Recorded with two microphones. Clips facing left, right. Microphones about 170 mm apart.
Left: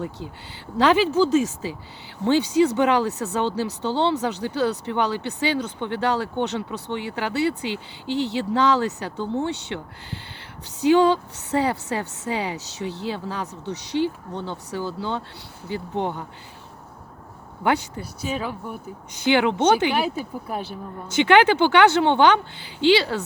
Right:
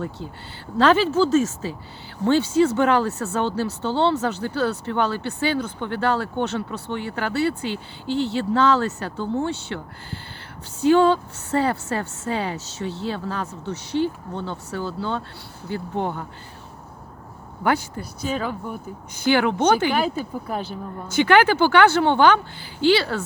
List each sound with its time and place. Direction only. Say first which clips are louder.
0.8 s a woman's voice: right 1 dB; 15° left (ahead or behind)
17.6 s a woman's voice: even; 20° left (ahead or behind)
18.2 s speech: right 2 dB; 5° left (ahead or behind)
19.1 s a woman's voice: even; 20° left (ahead or behind)
19.9 s speech: right 1 dB; 5° left (ahead or behind)
21.1 s a woman's voice: even; 20° left (ahead or behind)